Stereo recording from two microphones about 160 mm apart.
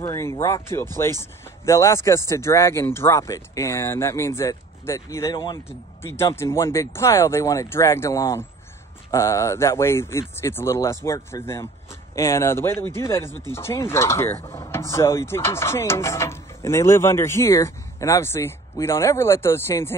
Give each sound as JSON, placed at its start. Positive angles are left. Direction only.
{"t": 0.0, "sound": "speech", "side_deg": 15}
{"t": 5.7, "sound": "speech", "side_deg": 15}